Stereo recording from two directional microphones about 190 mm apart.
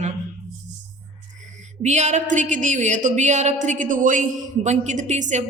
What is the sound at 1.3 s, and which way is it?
A woman's voice, 40° right (ahead or behind).